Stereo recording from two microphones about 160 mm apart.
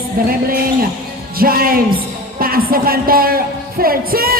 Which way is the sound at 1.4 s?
65° right (ahead or behind).